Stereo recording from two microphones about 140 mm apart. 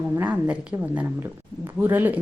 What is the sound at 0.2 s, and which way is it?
A woman's voice, 10° right (ahead or behind).